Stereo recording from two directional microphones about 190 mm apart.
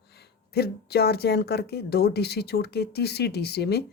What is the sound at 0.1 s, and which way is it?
A woman's voice, 60° left (ahead or behind).